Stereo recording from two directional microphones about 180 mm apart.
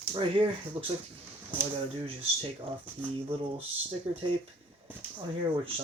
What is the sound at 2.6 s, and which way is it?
Speech, 30° right (ahead or behind).